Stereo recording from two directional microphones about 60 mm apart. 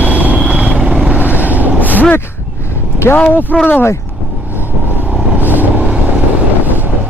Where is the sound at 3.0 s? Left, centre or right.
Left.